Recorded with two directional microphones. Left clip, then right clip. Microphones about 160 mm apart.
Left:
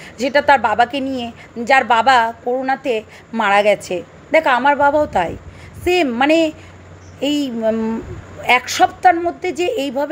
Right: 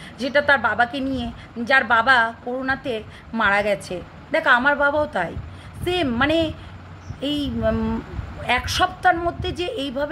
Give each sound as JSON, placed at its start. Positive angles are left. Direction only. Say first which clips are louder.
{"t": 0.0, "sound": "a woman's voice", "louder": "left 5 dB", "side_deg": 35}